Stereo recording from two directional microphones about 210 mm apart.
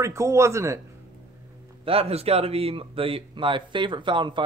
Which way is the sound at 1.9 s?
30° right (ahead or behind).